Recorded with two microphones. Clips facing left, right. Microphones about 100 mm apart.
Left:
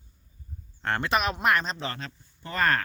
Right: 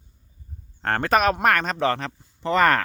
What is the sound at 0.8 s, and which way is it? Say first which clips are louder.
Speech: right 6 dB; 45° right (ahead or behind).